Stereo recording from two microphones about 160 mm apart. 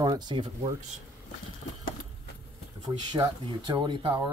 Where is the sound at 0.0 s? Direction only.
25° right (ahead or behind).